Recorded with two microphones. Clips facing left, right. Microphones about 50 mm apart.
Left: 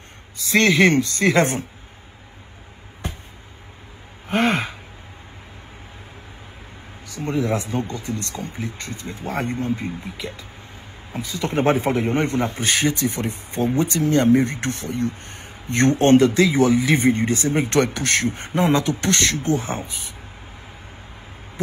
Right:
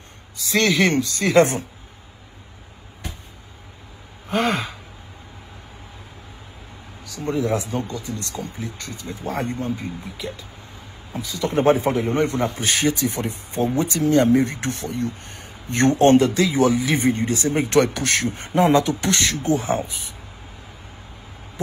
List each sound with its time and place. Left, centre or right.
0.5 s speech: left
3.0 s a sound: left
4.3 s gasp: left
7.1 s speech: left
19.0 s speech: centre
19.3 s speech: left